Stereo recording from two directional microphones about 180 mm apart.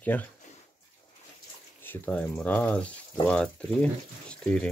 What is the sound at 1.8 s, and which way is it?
Speech, 10° left (ahead or behind).